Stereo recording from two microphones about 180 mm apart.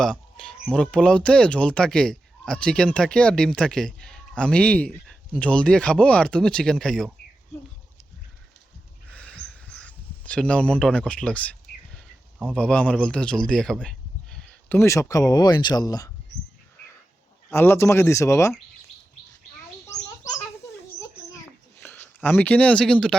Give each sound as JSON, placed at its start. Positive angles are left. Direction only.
{"t": 0.0, "sound": "speech", "side_deg": 5}
{"t": 9.1, "sound": "a sound", "side_deg": 5}
{"t": 14.8, "sound": "speech", "side_deg": 15}
{"t": 17.5, "sound": "speech", "side_deg": 15}
{"t": 21.8, "sound": "speech", "side_deg": 10}